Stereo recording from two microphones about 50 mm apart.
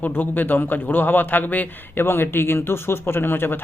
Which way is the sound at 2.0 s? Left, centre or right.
Left.